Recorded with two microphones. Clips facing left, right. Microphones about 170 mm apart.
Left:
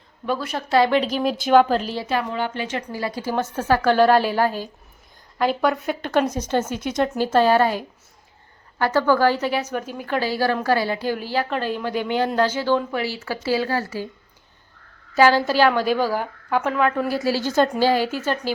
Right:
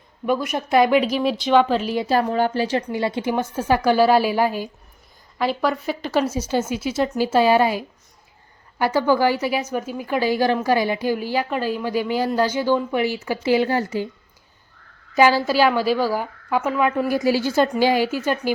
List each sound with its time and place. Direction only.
0.3 s a woman's voice: 15° right (ahead or behind)
2.0 s a woman's voice: 35° right (ahead or behind)
2.9 s a woman's voice: 25° right (ahead or behind)
5.4 s a woman's voice: centre (ahead or behind); by 14.1 s 20° right (ahead or behind)
15.1 s a woman's voice: 10° right (ahead or behind)